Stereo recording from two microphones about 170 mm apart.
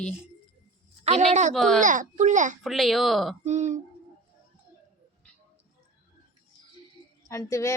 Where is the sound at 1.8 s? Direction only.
50° right (ahead or behind).